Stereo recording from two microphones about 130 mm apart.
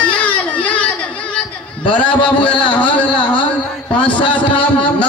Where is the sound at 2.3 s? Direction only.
40° left (ahead or behind).